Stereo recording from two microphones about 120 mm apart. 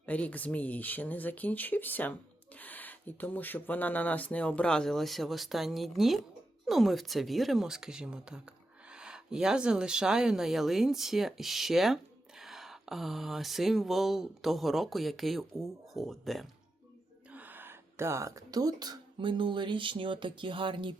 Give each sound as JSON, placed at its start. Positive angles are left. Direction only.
{"t": 0.0, "sound": "speech", "side_deg": 10}
{"t": 6.7, "sound": "a sound", "side_deg": 0}
{"t": 17.3, "sound": "speech", "side_deg": -15}